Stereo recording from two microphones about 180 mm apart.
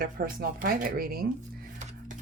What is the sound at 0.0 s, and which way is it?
Speech, 55° right (ahead or behind).